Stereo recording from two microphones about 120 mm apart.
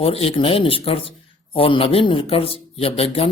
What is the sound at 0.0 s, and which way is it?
A man's voice, 55° left (ahead or behind).